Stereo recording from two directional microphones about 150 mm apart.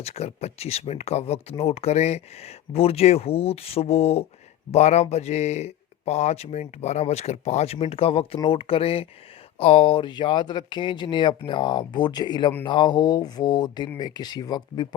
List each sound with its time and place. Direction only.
0.0 s speech: 45° left (ahead or behind)
12.6 s mantra: 30° left (ahead or behind)